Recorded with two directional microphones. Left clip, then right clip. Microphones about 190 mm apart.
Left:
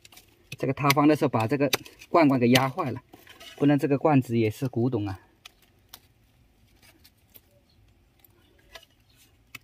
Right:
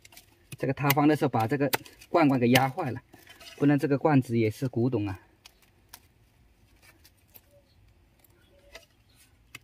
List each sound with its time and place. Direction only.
0.6 s speech: 30° left (ahead or behind)